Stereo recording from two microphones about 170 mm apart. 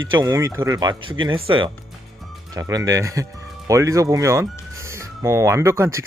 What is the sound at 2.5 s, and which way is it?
Speech, 20° right (ahead or behind).